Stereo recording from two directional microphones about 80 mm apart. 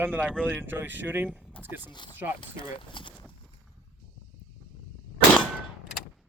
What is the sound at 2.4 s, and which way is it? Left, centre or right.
Speech, left.